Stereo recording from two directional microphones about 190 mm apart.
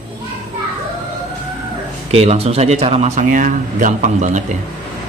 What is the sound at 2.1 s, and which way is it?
Speech, 35° right (ahead or behind).